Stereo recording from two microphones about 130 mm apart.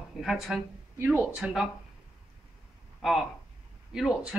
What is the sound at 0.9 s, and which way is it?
Speech, 15° right (ahead or behind).